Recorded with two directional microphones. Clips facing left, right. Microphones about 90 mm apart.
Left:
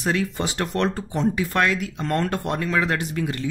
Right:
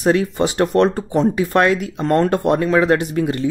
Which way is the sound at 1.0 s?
45° right (ahead or behind).